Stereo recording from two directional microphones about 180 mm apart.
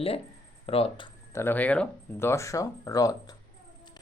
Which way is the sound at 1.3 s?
10° left (ahead or behind).